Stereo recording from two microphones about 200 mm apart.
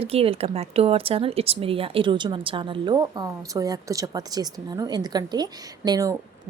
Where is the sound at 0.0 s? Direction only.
30° right (ahead or behind).